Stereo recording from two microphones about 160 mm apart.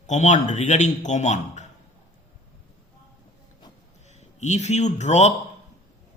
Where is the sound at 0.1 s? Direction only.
50° left (ahead or behind).